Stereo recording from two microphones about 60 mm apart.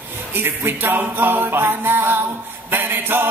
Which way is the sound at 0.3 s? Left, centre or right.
Right.